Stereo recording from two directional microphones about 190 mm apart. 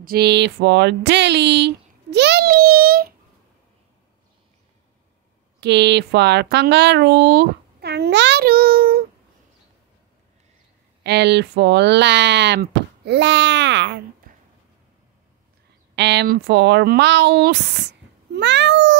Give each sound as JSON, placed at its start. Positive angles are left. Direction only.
{"t": 0.0, "sound": "speech", "side_deg": -55}
{"t": 5.6, "sound": "speech", "side_deg": -65}
{"t": 11.1, "sound": "speech", "side_deg": -60}
{"t": 14.3, "sound": "a sound", "side_deg": -45}
{"t": 15.9, "sound": "speech", "side_deg": -65}